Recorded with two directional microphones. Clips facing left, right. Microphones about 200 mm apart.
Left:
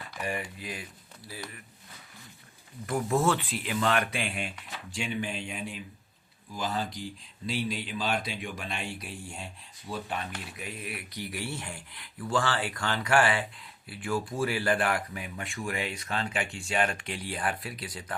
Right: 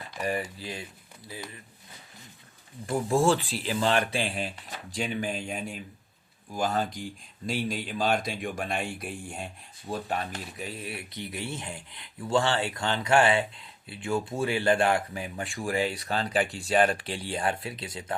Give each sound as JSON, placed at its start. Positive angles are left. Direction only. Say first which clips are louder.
{"t": 0.2, "sound": "speech", "louder": "right 4 dB", "side_deg": -35}
{"t": 2.8, "sound": "speech", "louder": "right 3 dB", "side_deg": -30}
{"t": 9.9, "sound": "speech", "louder": "right 3 dB", "side_deg": -40}